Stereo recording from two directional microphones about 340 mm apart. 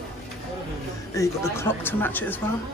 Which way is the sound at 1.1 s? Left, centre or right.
Centre.